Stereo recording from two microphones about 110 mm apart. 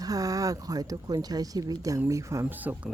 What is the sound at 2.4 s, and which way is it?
Speech, 15° right (ahead or behind).